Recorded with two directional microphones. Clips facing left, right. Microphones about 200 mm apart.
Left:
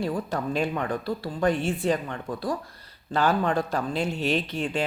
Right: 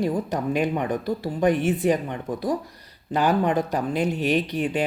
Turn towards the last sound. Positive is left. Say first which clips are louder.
# right 4 dB
turn(degrees=-15)  # may be behind; listen again after turning